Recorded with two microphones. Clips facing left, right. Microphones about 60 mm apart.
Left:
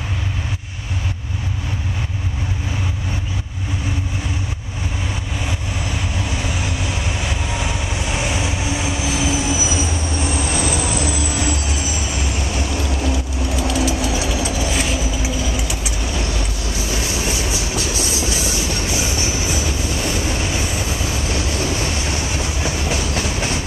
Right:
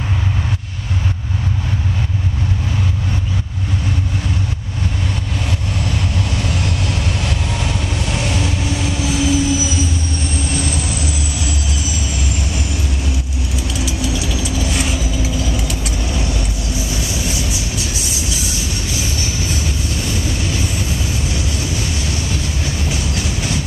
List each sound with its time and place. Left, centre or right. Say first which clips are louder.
5.9 s vehicle: right 2 dB; centre
13.7 s train: left 3 dB; left
14.6 s vehicle: even; centre
18.3 s music: left 2 dB; left
22.0 s train: even; left